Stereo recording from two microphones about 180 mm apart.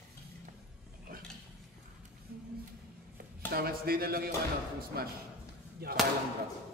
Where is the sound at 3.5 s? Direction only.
55° right (ahead or behind).